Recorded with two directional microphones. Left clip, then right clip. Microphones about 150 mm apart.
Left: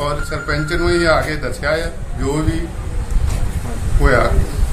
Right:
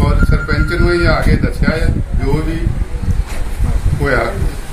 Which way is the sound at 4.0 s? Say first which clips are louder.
Even; 5° left (ahead or behind).